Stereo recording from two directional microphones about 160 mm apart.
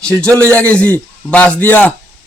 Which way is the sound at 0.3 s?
10° left (ahead or behind).